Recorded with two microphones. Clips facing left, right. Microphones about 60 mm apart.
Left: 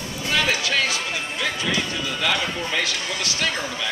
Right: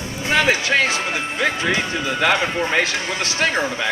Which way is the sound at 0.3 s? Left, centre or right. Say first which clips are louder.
Right 5 dB; right.